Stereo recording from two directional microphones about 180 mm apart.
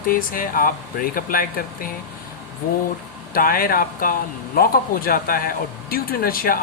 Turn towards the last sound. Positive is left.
turn(degrees=55)  # may be behind; listen again after turning